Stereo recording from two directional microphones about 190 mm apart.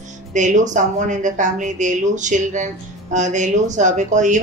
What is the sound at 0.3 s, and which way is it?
Speech, 40° right (ahead or behind).